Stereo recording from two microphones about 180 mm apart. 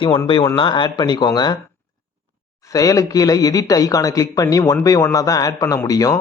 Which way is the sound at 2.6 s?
20° left (ahead or behind).